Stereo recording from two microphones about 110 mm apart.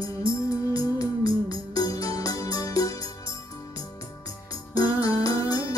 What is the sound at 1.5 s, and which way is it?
Music, 35° left (ahead or behind).